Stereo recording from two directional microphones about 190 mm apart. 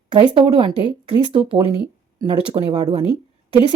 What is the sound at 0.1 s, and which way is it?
Speech, 25° right (ahead or behind).